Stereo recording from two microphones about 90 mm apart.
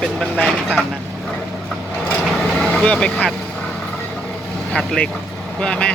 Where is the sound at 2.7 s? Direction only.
10° left (ahead or behind).